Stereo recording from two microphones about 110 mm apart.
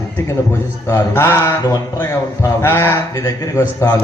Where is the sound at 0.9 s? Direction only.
20° left (ahead or behind).